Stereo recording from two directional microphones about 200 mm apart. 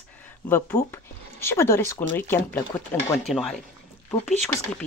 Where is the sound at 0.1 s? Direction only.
10° left (ahead or behind).